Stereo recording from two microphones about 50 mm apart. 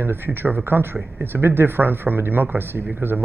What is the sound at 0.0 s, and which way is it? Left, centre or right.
Speech, right.